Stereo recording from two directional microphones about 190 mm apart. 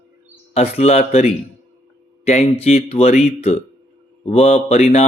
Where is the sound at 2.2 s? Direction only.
35° left (ahead or behind).